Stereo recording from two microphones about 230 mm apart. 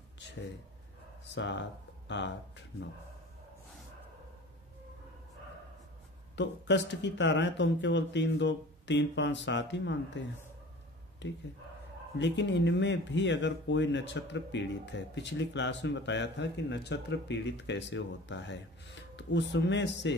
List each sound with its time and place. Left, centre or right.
1.2 s speech: left
6.3 s speech: left